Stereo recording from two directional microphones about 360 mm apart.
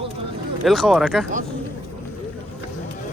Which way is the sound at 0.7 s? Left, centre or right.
Centre.